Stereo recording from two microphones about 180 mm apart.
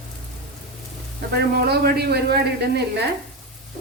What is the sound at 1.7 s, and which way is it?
Speech, 60° right (ahead or behind).